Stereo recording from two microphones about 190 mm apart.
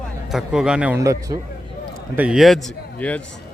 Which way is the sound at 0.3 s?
5° right (ahead or behind).